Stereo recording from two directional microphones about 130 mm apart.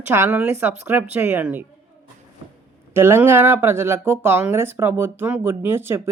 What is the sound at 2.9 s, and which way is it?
Speech, 20° right (ahead or behind).